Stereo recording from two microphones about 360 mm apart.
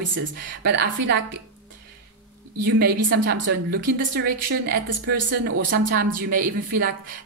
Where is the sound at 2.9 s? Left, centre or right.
Right.